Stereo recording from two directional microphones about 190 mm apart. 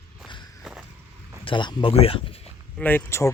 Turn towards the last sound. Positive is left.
turn(degrees=15)  # may be behind; listen again after turning